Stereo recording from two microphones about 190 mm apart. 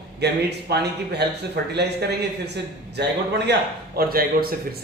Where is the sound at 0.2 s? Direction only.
60° right (ahead or behind).